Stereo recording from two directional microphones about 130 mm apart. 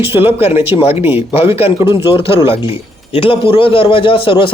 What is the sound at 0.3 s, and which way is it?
A man's voice, 50° left (ahead or behind).